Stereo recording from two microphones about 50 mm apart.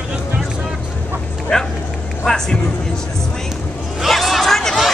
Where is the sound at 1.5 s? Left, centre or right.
Centre.